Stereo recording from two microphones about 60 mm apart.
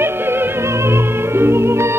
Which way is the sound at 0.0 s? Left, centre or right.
Right.